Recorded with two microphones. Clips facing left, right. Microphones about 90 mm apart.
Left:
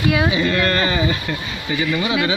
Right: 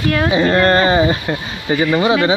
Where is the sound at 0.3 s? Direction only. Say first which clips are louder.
Right 6 dB; 35° right (ahead or behind).